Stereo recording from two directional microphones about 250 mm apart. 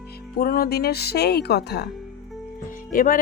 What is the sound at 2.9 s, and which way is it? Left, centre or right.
Speech, left.